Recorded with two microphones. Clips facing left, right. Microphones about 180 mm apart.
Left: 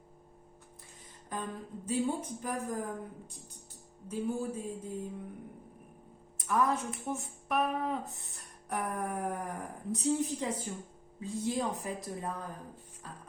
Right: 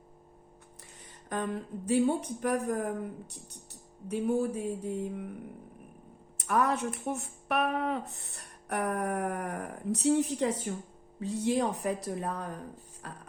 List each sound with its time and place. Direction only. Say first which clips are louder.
1.3 s speech: right 6 dB; 75° right (ahead or behind)
6.3 s speech: right 2 dB; 70° right (ahead or behind)